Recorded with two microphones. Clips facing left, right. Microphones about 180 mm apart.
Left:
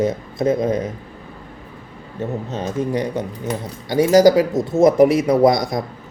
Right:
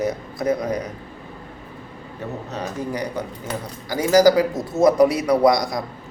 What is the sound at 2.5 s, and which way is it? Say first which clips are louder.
Speech: left 5 dB; 20° left (ahead or behind).